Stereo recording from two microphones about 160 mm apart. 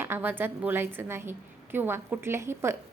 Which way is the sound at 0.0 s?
15° right (ahead or behind).